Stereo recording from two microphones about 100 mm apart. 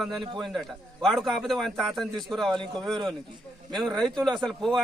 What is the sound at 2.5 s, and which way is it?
Speech, 50° right (ahead or behind).